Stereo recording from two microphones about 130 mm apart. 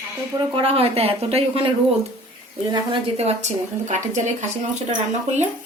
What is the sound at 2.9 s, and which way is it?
Speech, 50° right (ahead or behind).